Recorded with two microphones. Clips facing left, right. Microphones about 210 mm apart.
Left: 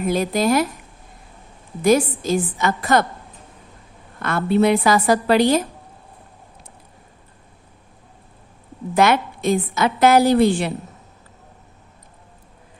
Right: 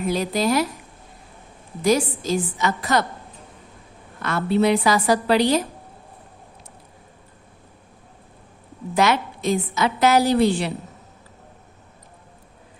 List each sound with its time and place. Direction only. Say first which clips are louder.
0.1 s a woman's voice: left 3 dB; 50° left (ahead or behind)
1.8 s a woman's voice: left 3 dB; 55° left (ahead or behind)
4.2 s a woman's voice: left 2 dB; 55° left (ahead or behind)
9.0 s a woman's voice: left 3 dB; 55° left (ahead or behind)